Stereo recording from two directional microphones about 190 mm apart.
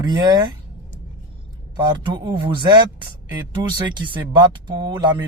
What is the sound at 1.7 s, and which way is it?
Speech, 25° right (ahead or behind).